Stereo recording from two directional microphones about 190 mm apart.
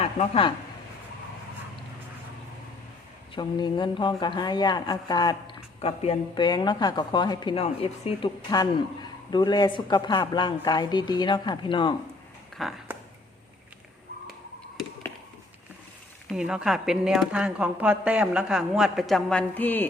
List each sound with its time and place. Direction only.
0.0 s speech: 30° left (ahead or behind)
3.3 s speech: 25° left (ahead or behind)
5.8 s speech: 30° left (ahead or behind)
8.4 s speech: 20° left (ahead or behind)
12.5 s a sound: centre (ahead or behind)
16.3 s a woman's voice: 5° right (ahead or behind)